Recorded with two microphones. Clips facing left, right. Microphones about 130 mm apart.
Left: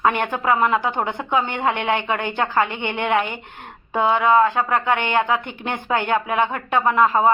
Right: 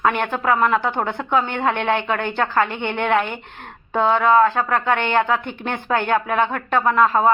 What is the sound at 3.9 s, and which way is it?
A woman's voice, 15° left (ahead or behind).